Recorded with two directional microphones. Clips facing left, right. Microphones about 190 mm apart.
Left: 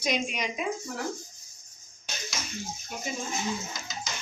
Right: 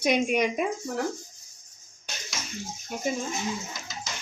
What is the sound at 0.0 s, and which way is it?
Speech, 55° right (ahead or behind).